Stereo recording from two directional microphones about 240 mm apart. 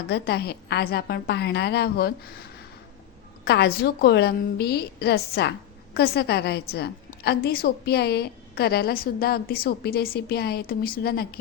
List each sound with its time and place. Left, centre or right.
0.1 s a woman's voice: left
3.4 s a woman's voice: left